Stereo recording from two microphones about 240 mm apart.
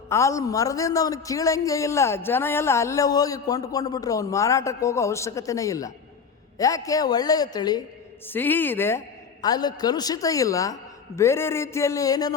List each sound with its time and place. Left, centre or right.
0.1 s a man's voice: centre